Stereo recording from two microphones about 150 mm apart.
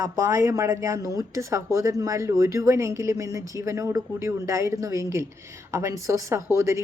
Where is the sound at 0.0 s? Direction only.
20° right (ahead or behind).